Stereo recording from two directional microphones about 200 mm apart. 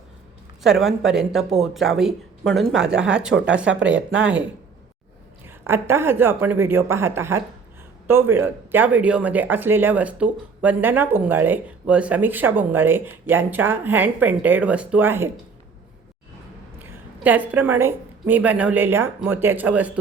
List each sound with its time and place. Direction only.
0.6 s speech: centre (ahead or behind)
5.6 s speech: 10° right (ahead or behind)
16.8 s a woman's voice: 10° right (ahead or behind)